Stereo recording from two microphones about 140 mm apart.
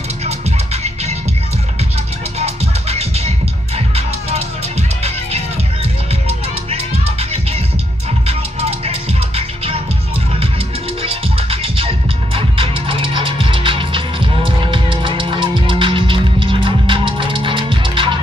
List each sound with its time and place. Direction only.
2.3 s music: 50° right (ahead or behind)
8.3 s music: 45° right (ahead or behind)
11.0 s music: 40° right (ahead or behind)